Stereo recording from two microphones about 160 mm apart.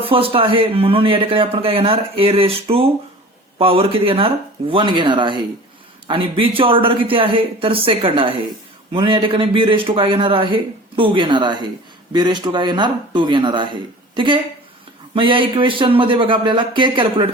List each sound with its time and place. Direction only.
0.0 s speech: 35° right (ahead or behind)
15.1 s speech: 30° right (ahead or behind)